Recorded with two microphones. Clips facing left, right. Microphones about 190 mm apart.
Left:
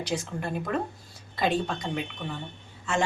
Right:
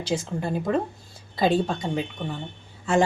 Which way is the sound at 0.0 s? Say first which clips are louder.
Right 4 dB; 30° right (ahead or behind).